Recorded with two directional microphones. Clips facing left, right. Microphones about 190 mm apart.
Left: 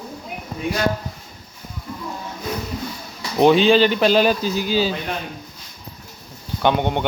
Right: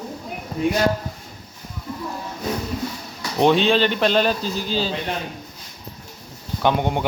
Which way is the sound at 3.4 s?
Centre (ahead or behind).